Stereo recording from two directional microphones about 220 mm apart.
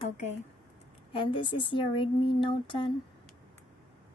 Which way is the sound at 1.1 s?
25° left (ahead or behind).